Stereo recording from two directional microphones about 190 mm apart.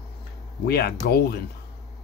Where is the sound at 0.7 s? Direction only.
55° left (ahead or behind).